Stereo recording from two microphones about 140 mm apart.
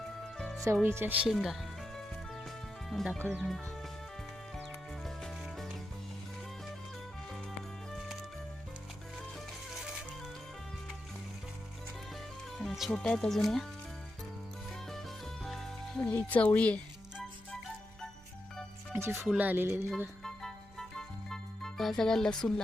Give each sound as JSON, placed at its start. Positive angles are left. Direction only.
{"t": 0.3, "sound": "music", "side_deg": 5}
{"t": 0.8, "sound": "music", "side_deg": -15}
{"t": 2.9, "sound": "speech", "side_deg": 0}
{"t": 5.0, "sound": "music", "side_deg": 0}
{"t": 7.9, "sound": "music", "side_deg": 0}
{"t": 9.6, "sound": "music", "side_deg": 0}
{"t": 12.5, "sound": "speech", "side_deg": 0}
{"t": 14.7, "sound": "music", "side_deg": 0}
{"t": 16.1, "sound": "speech", "side_deg": 10}
{"t": 18.9, "sound": "music", "side_deg": -15}
{"t": 20.2, "sound": "music", "side_deg": 5}